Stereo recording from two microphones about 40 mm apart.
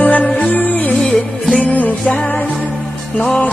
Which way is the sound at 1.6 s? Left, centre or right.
Left.